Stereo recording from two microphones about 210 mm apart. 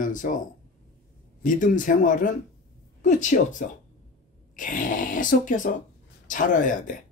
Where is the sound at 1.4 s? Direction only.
40° left (ahead or behind).